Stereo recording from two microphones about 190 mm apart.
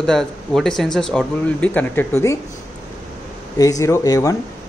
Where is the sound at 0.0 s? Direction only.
5° left (ahead or behind).